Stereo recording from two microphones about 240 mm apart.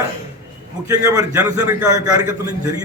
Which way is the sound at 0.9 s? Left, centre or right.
Centre.